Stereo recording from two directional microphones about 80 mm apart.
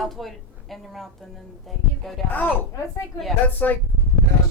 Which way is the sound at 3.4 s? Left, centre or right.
Left.